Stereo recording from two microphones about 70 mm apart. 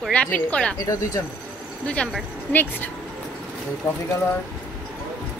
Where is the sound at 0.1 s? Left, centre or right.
Centre.